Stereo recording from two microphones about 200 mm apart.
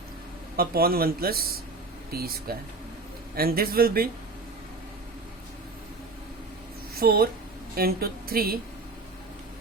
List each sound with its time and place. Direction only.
0.5 s speech: 50° right (ahead or behind)
7.0 s speech: 50° right (ahead or behind)